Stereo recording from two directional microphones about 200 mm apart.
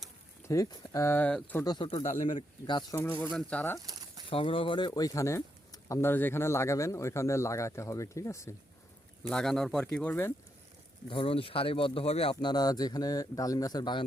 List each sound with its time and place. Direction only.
0.4 s speech: 15° left (ahead or behind)
1.6 s speech: 25° left (ahead or behind); by 3.8 s 5° left (ahead or behind)
3.8 s a sound: 15° right (ahead or behind)
4.3 s speech: 25° left (ahead or behind)
9.3 s speech: 5° left (ahead or behind)
11.1 s speech: 25° left (ahead or behind)